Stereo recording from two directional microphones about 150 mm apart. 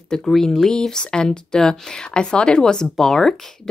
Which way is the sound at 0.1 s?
Centre (ahead or behind).